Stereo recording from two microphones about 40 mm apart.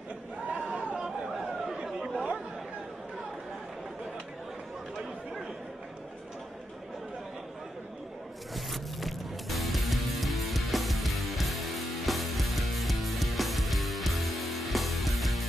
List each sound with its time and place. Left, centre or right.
0.7 s chatter: right
0.9 s chatter: centre
8.5 s music: centre